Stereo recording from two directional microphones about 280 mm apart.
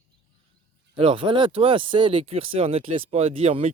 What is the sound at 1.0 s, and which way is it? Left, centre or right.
Speech, centre.